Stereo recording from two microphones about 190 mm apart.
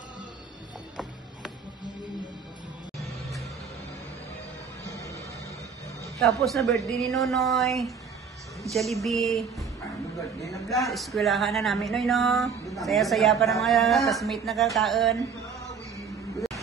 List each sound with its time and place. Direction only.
3.0 s music: centre (ahead or behind)
4.8 s music: 15° left (ahead or behind)
6.1 s speech: centre (ahead or behind)
10.7 s speech: centre (ahead or behind)